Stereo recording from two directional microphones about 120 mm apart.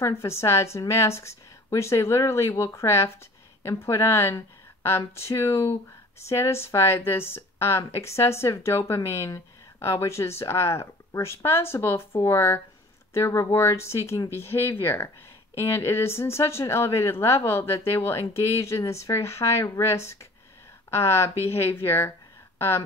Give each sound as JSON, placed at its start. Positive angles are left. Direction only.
{"t": 0.0, "sound": "speech", "side_deg": 20}